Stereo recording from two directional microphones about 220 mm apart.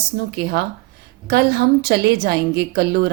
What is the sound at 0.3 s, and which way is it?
A woman's voice, 45° right (ahead or behind).